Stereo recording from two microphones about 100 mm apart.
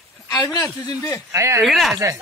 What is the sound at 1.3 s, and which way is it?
Speech, 30° right (ahead or behind).